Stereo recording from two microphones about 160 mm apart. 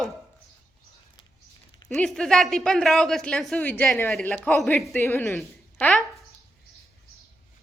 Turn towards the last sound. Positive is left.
turn(degrees=5)  # may be behind; listen again after turning